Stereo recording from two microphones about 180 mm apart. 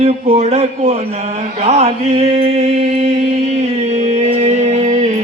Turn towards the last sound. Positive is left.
turn(degrees=-40)  # may be behind; listen again after turning